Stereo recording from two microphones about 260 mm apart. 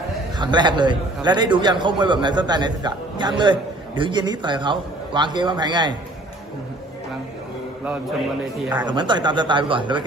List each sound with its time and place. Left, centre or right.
0.3 s a man's voice: centre
8.7 s a man's voice: centre